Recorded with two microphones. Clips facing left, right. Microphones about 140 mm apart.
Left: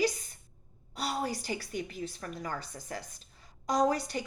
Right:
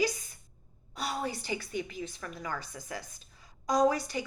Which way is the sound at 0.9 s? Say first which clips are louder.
Left 1 dB; 35° left (ahead or behind).